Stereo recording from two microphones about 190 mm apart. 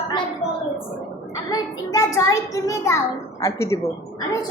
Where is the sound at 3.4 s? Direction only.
15° left (ahead or behind).